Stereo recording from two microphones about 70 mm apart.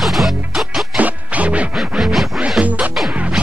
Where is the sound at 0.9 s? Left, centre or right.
Right.